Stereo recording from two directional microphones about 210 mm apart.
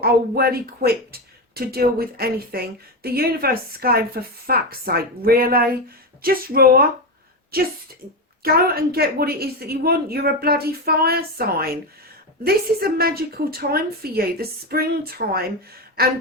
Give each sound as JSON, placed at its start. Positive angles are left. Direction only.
{"t": 0.0, "sound": "a woman's voice", "side_deg": -45}